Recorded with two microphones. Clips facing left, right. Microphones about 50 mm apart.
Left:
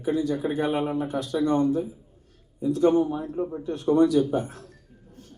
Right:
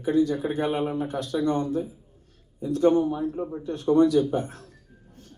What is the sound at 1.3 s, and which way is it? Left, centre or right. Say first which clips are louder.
A man's voice: left 3 dB; left.